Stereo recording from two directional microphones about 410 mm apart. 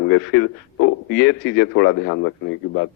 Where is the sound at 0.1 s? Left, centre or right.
Left.